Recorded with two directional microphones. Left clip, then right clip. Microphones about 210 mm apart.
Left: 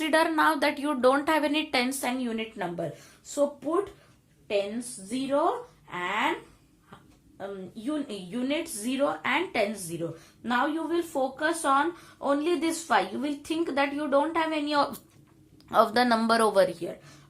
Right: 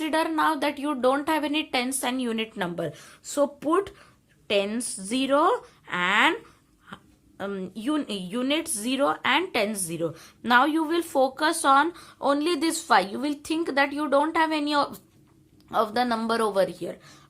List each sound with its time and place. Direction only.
0.0 s speech: 10° right (ahead or behind); by 3.8 s 30° right (ahead or behind)
5.0 s speech: 30° right (ahead or behind)
7.3 s speech: 25° right (ahead or behind); by 16.9 s 10° right (ahead or behind)